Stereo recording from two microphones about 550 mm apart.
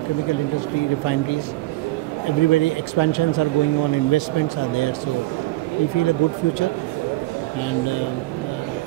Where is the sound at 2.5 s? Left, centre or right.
Left.